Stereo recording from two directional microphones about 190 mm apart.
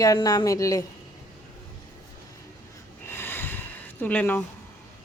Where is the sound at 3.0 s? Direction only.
10° left (ahead or behind).